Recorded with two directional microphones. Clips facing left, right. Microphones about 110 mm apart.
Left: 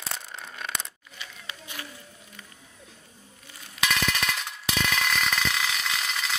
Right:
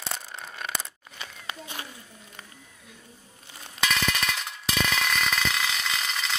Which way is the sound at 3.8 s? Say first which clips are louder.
Even; centre (ahead or behind).